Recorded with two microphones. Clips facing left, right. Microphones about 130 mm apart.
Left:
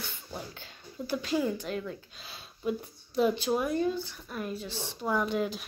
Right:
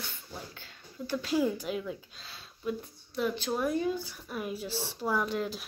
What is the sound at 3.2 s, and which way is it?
Speech, 15° left (ahead or behind).